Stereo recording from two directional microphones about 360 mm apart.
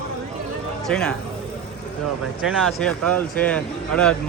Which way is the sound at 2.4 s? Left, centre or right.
Centre.